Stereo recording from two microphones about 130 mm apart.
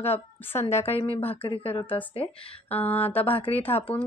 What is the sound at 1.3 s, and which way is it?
Speech, 45° left (ahead or behind).